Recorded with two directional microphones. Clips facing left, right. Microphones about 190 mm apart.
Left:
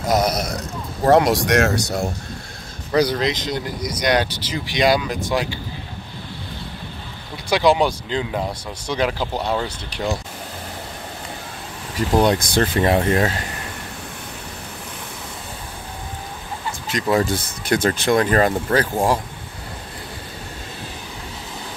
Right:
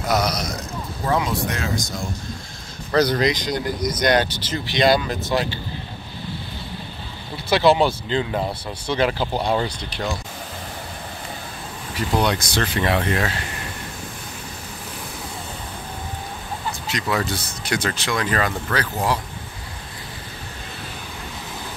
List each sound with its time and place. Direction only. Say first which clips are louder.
0.1 s speech: left 3 dB; 50° left (ahead or behind)
1.0 s speech: left 8 dB; 75° left (ahead or behind)
2.9 s speech: even; 10° left (ahead or behind)
7.4 s speech: even; 15° left (ahead or behind)
9.3 s speech: right 1 dB; 10° right (ahead or behind)
9.8 s speech: left 3 dB; 10° left (ahead or behind)
12.2 s speech: left 5 dB; 45° left (ahead or behind)
16.9 s speech: left 6 dB; 50° left (ahead or behind)